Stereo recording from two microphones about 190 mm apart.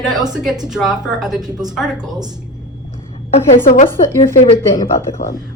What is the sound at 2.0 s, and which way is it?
Speech, 20° right (ahead or behind).